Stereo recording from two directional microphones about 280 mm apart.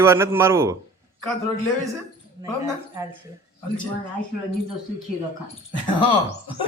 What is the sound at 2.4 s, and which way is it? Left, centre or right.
Chuckle, centre.